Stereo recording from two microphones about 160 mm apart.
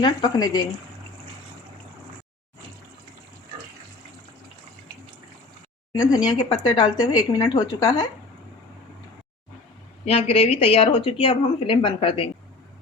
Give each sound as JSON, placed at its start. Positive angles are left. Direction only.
{"t": 0.0, "sound": "a woman's voice", "side_deg": 25}
{"t": 6.2, "sound": "a woman's voice", "side_deg": 30}
{"t": 10.1, "sound": "speech", "side_deg": 40}